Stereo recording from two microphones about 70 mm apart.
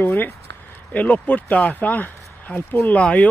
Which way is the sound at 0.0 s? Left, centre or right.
Left.